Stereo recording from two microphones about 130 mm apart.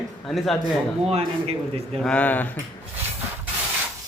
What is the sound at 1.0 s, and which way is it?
Speech, 50° right (ahead or behind).